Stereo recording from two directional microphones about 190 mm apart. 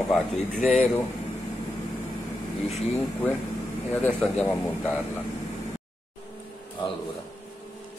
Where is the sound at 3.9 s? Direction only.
10° left (ahead or behind).